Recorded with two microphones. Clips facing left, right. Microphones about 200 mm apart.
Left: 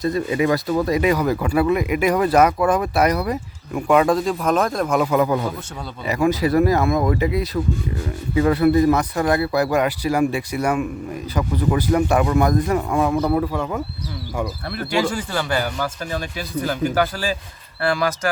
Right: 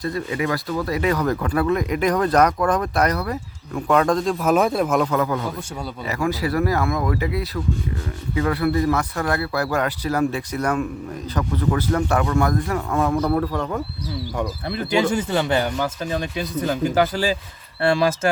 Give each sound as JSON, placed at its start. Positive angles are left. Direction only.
{"t": 0.0, "sound": "speech", "side_deg": 20}
{"t": 5.1, "sound": "speech", "side_deg": 15}
{"t": 13.0, "sound": "speech", "side_deg": 0}
{"t": 14.7, "sound": "speech", "side_deg": -20}